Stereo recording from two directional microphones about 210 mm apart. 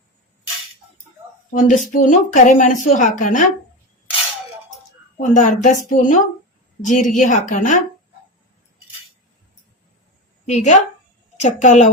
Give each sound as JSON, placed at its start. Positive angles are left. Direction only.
{"t": 1.5, "sound": "a woman's voice", "side_deg": 40}
{"t": 5.2, "sound": "a woman's voice", "side_deg": 35}
{"t": 10.4, "sound": "a woman's voice", "side_deg": 35}